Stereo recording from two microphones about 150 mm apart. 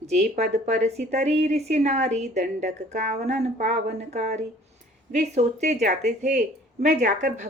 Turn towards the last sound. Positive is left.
turn(degrees=-55)  # may be behind; listen again after turning